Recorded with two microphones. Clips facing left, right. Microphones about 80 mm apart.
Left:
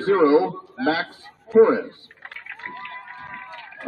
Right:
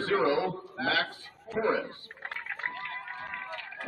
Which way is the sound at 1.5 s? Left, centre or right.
Left.